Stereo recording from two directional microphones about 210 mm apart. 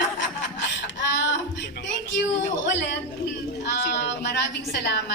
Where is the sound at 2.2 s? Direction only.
55° left (ahead or behind).